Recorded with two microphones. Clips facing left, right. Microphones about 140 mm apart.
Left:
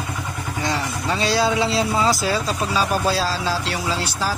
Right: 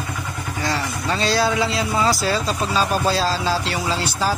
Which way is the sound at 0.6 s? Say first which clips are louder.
Even; 15° left (ahead or behind).